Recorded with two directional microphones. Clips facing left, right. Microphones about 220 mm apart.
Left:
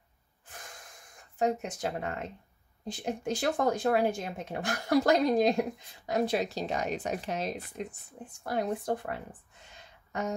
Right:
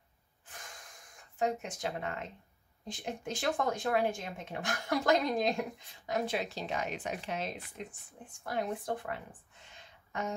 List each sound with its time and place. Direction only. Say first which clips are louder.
1.4 s speech: left 4 dB; 40° left (ahead or behind)